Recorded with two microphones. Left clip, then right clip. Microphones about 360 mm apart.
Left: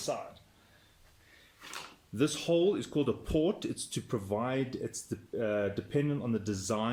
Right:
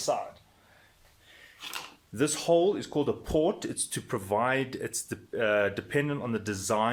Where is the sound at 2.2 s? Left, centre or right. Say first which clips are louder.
Right 4 dB; centre.